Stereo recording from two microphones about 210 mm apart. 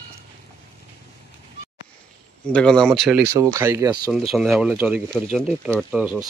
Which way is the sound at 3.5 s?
15° right (ahead or behind).